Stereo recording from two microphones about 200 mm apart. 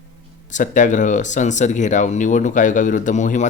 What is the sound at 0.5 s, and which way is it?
Speech, 40° left (ahead or behind).